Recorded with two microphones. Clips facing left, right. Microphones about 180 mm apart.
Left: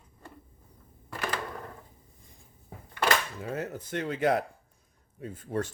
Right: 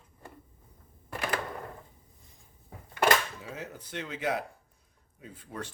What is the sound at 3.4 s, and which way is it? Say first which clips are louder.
Speech: left 7 dB; 50° left (ahead or behind).